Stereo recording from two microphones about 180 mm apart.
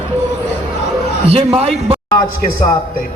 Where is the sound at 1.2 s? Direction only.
35° right (ahead or behind).